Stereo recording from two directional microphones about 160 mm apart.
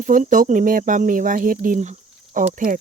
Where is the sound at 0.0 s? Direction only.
55° right (ahead or behind).